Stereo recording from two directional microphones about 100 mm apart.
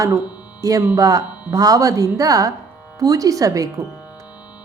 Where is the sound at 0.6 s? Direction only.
35° right (ahead or behind).